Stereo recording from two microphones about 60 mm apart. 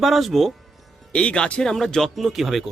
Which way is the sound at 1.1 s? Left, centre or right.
Left.